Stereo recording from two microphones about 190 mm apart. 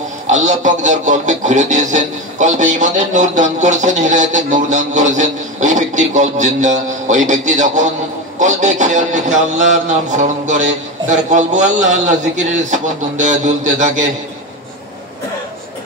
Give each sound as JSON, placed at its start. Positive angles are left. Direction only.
{"t": 0.3, "sound": "speech", "side_deg": -40}